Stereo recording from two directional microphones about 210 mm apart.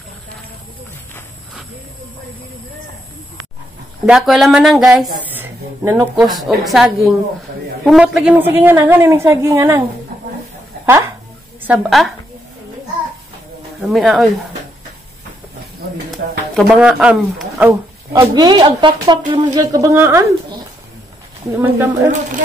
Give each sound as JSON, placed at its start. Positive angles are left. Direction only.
{"t": 4.0, "sound": "a woman's voice", "side_deg": 0}
{"t": 11.6, "sound": "speech", "side_deg": -5}
{"t": 13.7, "sound": "speech", "side_deg": 0}
{"t": 16.5, "sound": "speech", "side_deg": -5}
{"t": 18.2, "sound": "speech", "side_deg": -20}
{"t": 21.5, "sound": "a woman's voice", "side_deg": -15}